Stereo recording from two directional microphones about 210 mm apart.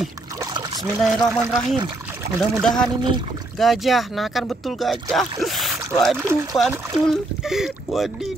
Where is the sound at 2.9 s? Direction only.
20° right (ahead or behind).